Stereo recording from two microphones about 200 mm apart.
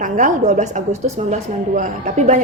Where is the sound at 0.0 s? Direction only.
40° right (ahead or behind).